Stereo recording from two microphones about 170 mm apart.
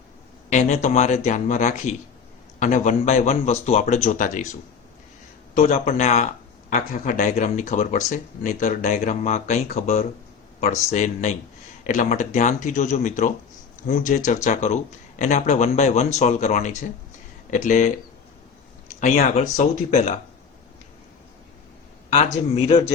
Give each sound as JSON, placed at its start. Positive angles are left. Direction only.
{"t": 0.5, "sound": "speech", "side_deg": 45}
{"t": 5.5, "sound": "a man's voice", "side_deg": 45}
{"t": 18.9, "sound": "speech", "side_deg": 45}
{"t": 22.1, "sound": "a man's voice", "side_deg": 40}